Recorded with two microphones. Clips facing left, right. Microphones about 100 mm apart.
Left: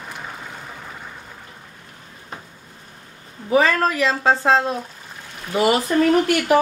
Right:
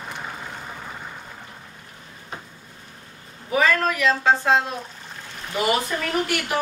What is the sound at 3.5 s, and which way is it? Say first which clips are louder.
Speech: left 3 dB; 30° left (ahead or behind).